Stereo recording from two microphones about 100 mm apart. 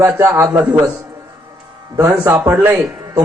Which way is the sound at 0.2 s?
20° right (ahead or behind).